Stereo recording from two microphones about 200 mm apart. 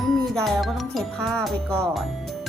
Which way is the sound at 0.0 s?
Centre (ahead or behind).